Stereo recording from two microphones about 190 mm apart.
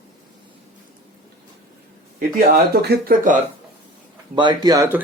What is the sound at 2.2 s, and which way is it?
Speech, 50° right (ahead or behind).